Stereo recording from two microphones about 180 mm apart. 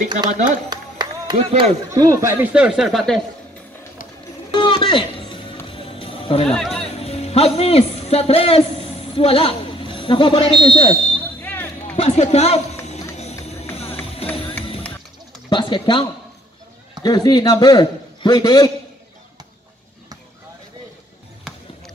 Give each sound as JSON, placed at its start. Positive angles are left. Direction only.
{"t": 0.7, "sound": "clapping", "side_deg": -25}
{"t": 1.3, "sound": "speech", "side_deg": -35}
{"t": 2.0, "sound": "speech", "side_deg": -15}
{"t": 4.6, "sound": "music", "side_deg": 30}
{"t": 6.4, "sound": "speech", "side_deg": 5}
{"t": 7.0, "sound": "a man's voice", "side_deg": 35}
{"t": 11.4, "sound": "basketball bounce", "side_deg": 10}
{"t": 12.0, "sound": "speech", "side_deg": 35}
{"t": 13.5, "sound": "music", "side_deg": 35}
{"t": 15.5, "sound": "a man's voice", "side_deg": 25}
{"t": 21.5, "sound": "rowboat", "side_deg": 0}